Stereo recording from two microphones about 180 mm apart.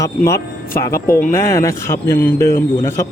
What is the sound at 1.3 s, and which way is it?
Speech, 15° left (ahead or behind).